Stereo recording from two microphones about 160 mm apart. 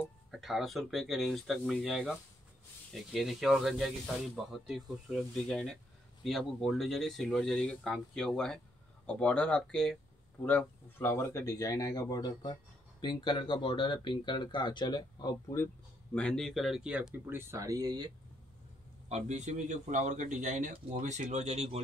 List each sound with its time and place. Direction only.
0.3 s speech: centre (ahead or behind); by 15.7 s 20° left (ahead or behind)
16.2 s speech: 5° left (ahead or behind); by 18.1 s 25° right (ahead or behind)
19.0 s a man's voice: 45° right (ahead or behind)